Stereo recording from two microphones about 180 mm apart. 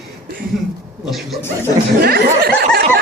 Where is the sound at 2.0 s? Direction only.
60° right (ahead or behind).